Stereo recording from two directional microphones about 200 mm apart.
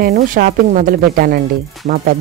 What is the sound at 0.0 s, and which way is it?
A man's voice, 45° right (ahead or behind).